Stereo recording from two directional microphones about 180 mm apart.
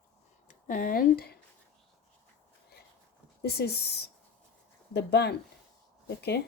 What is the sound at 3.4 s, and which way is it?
Speech, 65° left (ahead or behind).